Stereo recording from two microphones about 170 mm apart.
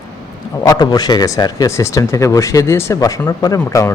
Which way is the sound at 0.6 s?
25° left (ahead or behind).